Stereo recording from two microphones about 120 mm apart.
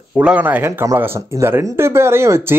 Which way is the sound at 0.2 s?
10° right (ahead or behind).